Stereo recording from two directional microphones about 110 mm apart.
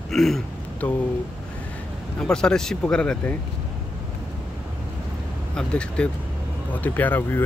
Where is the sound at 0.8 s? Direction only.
15° left (ahead or behind).